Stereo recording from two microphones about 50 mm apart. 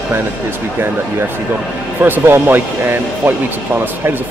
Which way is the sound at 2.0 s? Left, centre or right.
Right.